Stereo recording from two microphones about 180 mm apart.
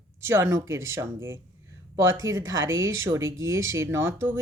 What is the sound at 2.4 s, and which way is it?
Speech, 90° right.